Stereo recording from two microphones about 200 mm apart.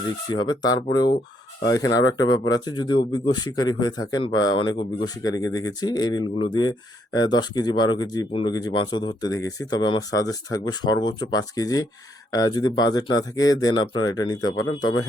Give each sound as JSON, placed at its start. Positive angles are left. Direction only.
{"t": 0.3, "sound": "speech", "side_deg": 20}